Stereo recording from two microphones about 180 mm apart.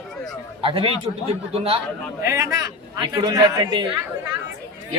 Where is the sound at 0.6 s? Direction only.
30° right (ahead or behind).